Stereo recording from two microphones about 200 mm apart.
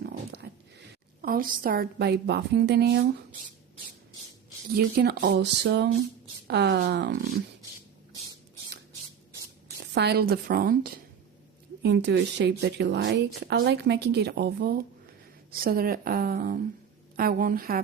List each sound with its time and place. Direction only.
0.0 s a sound: 55° right (ahead or behind)
1.2 s a woman's voice: 45° right (ahead or behind)
4.7 s a woman's voice: 55° right (ahead or behind)
9.9 s a woman's voice: 55° right (ahead or behind)
11.8 s a woman's voice: 60° right (ahead or behind)